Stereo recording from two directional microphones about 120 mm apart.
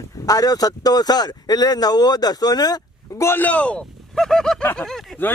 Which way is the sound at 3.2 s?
15° left (ahead or behind).